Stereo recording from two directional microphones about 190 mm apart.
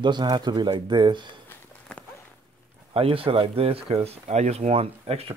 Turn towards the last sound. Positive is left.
turn(degrees=-30)  # may be behind; listen again after turning